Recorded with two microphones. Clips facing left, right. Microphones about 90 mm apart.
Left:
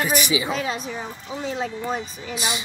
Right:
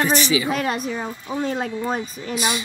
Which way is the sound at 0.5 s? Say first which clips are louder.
Right 3 dB; 55° right (ahead or behind).